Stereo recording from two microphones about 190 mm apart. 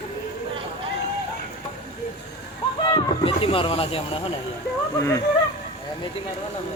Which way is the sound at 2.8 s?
30° left (ahead or behind).